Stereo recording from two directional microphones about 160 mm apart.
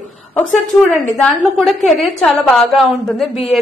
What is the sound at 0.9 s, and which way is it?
A woman's voice, centre (ahead or behind).